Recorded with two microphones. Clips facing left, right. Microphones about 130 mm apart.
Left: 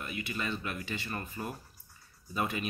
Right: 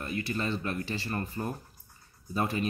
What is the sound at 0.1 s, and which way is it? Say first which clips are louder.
Speech: right 9 dB; 15° left (ahead or behind).